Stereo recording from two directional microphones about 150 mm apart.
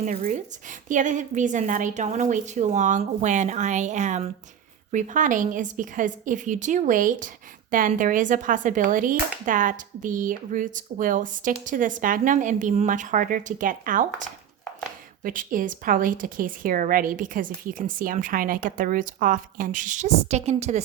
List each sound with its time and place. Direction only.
0.0 s a woman's voice: 55° right (ahead or behind)